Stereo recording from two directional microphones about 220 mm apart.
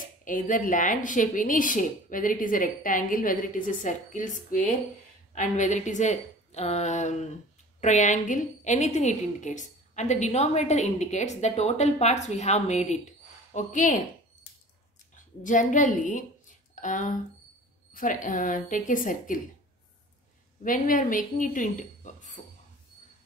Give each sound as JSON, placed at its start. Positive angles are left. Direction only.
{"t": 0.2, "sound": "a woman's voice", "side_deg": 35}
{"t": 15.1, "sound": "a woman's voice", "side_deg": 35}
{"t": 20.6, "sound": "speech", "side_deg": 35}